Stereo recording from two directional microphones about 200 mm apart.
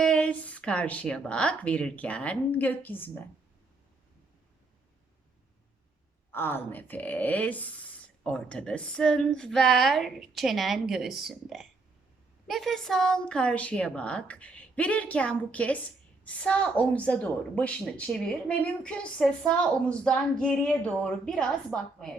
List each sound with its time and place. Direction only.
0.0 s a woman's voice: 5° left (ahead or behind)
6.3 s a woman's voice: 10° left (ahead or behind)